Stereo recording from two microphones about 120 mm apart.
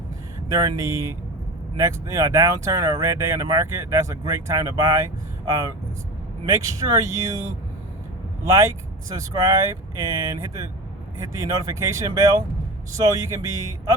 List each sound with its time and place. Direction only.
0.4 s speech: 25° right (ahead or behind)
7.0 s speech: 30° right (ahead or behind)
8.4 s speech: 30° right (ahead or behind)